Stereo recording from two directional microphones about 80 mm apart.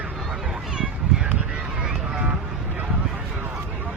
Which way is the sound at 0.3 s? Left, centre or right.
Centre.